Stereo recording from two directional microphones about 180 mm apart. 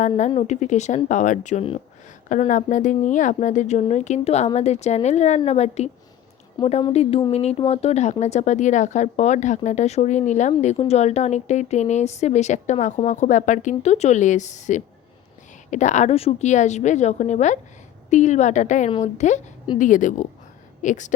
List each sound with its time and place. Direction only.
0.3 s a woman's voice: 35° left (ahead or behind)